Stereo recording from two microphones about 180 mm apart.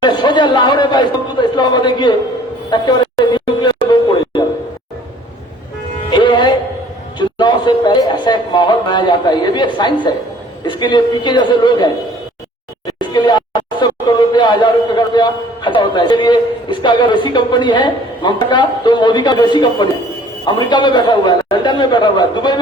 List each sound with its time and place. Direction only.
0.0 s speech: 25° left (ahead or behind)
2.6 s a sound: 25° left (ahead or behind)
6.1 s music: 25° left (ahead or behind)
7.2 s a man's voice: 25° left (ahead or behind)
13.0 s a sound: 25° left (ahead or behind)
20.4 s a man's voice: 25° left (ahead or behind)